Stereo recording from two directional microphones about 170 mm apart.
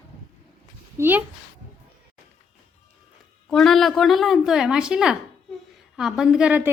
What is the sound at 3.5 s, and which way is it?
A woman's voice, centre (ahead or behind).